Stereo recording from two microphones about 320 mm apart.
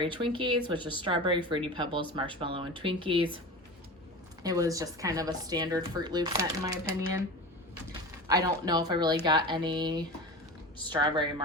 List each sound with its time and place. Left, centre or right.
0.0 s speech: centre
4.4 s speech: centre
8.3 s speech: centre